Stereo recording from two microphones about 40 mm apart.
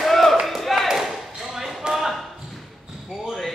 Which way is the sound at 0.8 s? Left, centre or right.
Centre.